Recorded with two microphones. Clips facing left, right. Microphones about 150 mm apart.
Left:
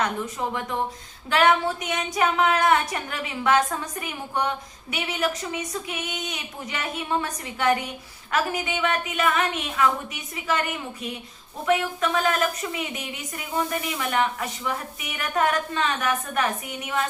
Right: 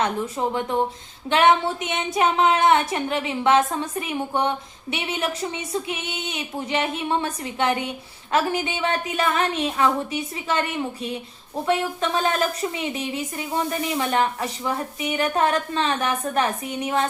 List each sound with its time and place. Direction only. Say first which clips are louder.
1.3 s female singing: right 2 dB; 25° right (ahead or behind)
8.3 s a woman's voice: right 3 dB; 30° right (ahead or behind)
11.6 s female singing: even; 30° right (ahead or behind)
14.0 s a woman's voice: right 2 dB; 30° right (ahead or behind)